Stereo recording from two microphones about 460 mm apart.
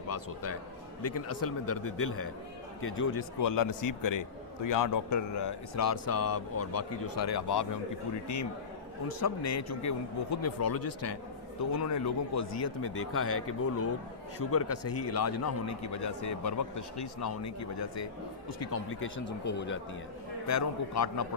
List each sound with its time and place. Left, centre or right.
0.1 s a man's voice: left
3.4 s a man's voice: left
7.3 s speech: left
9.0 s a man's voice: left
20.5 s a man's voice: left